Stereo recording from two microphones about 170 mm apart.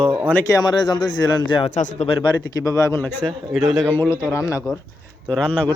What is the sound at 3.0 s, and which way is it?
Speech, 10° left (ahead or behind).